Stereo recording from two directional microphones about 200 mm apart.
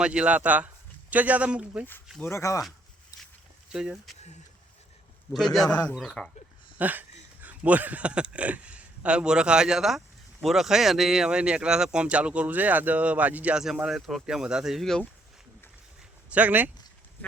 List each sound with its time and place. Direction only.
0.0 s speech: 5° right (ahead or behind)
2.3 s speech: 15° left (ahead or behind)
3.1 s a sound: 15° left (ahead or behind)
3.7 s speech: 5° right (ahead or behind)
5.9 s speech: centre (ahead or behind)
6.7 s a sound: 10° right (ahead or behind)
7.4 s speech: 10° right (ahead or behind)
16.3 s speech: 10° right (ahead or behind)